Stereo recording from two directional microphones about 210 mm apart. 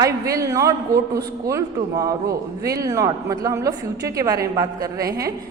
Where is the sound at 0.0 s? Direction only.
15° right (ahead or behind).